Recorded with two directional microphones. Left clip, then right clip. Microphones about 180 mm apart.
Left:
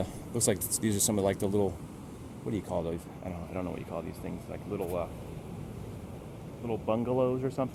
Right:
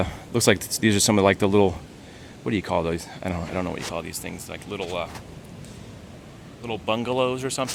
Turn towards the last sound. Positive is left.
turn(degrees=-30)  # may be behind; listen again after turning